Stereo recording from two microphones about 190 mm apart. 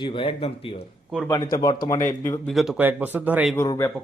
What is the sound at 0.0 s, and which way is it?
A man's voice, 25° left (ahead or behind).